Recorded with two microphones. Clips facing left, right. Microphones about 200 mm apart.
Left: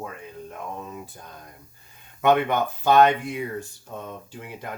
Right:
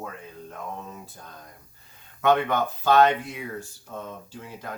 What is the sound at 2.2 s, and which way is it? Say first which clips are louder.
Speech: left 2 dB; 15° left (ahead or behind).